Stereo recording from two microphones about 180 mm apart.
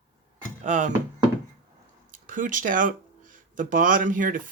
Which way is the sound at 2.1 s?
45° right (ahead or behind).